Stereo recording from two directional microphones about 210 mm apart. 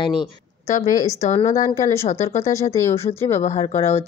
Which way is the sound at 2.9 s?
30° left (ahead or behind).